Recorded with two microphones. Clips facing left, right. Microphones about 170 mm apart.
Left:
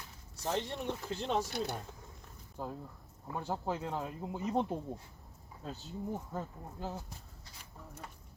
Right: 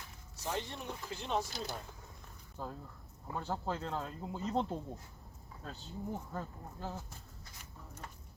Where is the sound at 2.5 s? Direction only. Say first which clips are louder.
Left 3 dB; 15° left (ahead or behind).